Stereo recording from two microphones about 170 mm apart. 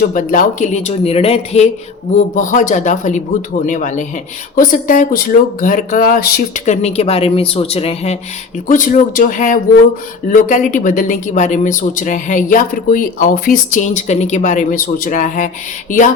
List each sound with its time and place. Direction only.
0.0 s speech: 55° left (ahead or behind); by 1.6 s 35° left (ahead or behind)
2.1 s speech: 50° left (ahead or behind)
6.7 s speech: 40° left (ahead or behind)
8.6 s speech: 55° left (ahead or behind)